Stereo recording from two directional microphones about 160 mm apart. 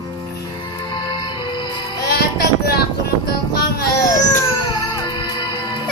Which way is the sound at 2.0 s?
80° left.